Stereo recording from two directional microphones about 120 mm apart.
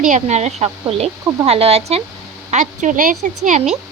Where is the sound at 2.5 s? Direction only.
90° right.